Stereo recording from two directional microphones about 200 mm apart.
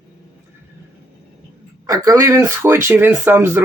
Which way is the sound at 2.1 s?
15° right (ahead or behind).